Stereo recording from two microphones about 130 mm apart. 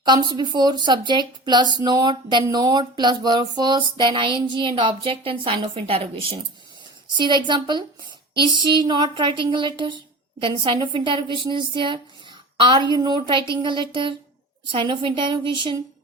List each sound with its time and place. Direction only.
0.0 s speech: 35° right (ahead or behind)
7.2 s speech: 35° right (ahead or behind)